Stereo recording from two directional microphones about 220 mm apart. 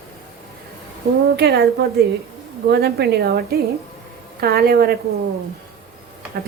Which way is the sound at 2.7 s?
45° right (ahead or behind).